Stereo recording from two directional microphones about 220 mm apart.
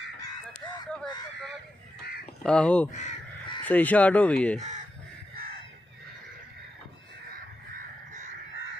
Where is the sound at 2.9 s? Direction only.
35° left (ahead or behind).